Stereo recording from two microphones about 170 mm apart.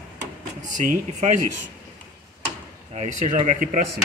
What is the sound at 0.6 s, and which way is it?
Speech, 50° right (ahead or behind).